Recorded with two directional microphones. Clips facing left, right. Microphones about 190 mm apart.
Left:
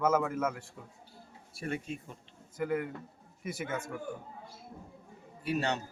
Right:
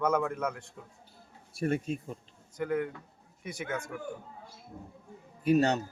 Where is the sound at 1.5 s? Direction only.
45° right (ahead or behind).